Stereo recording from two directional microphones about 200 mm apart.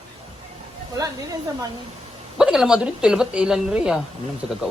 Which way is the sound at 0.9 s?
20° right (ahead or behind).